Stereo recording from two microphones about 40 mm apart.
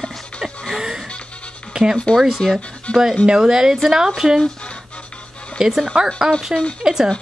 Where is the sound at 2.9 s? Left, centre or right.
Left.